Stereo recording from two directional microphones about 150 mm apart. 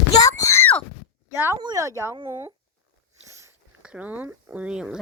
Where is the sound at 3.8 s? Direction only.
5° right (ahead or behind).